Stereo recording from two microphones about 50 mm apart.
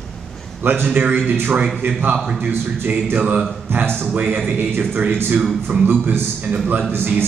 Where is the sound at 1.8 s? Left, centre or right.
Right.